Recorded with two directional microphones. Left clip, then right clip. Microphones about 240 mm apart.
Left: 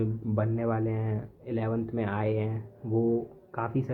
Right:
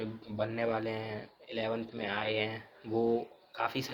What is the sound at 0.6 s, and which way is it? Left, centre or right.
Speech, right.